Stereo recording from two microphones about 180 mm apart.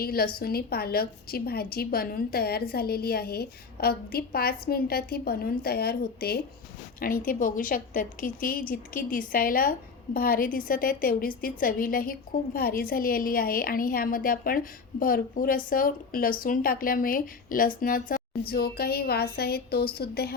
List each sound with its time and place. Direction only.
0.0 s a woman's voice: 55° left (ahead or behind)